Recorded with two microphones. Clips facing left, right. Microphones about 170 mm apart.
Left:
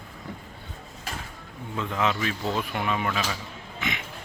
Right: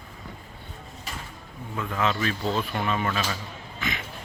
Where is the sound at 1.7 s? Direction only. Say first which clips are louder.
Even; 15° left (ahead or behind).